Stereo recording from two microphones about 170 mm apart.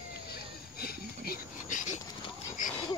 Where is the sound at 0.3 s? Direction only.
65° left (ahead or behind).